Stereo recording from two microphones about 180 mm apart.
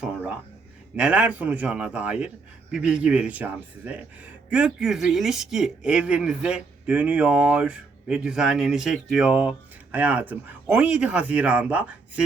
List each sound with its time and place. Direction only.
0.9 s a man's voice: 5° right (ahead or behind)